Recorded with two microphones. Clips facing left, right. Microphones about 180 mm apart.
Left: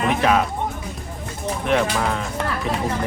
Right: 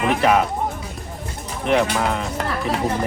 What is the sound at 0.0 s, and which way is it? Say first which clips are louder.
Speech: right 1 dB; 5° right (ahead or behind).